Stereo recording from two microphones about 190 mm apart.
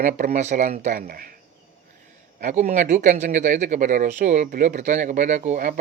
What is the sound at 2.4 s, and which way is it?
Speech, 40° right (ahead or behind).